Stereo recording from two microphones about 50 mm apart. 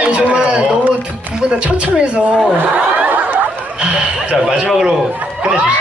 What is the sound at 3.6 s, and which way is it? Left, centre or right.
A man's voice, right.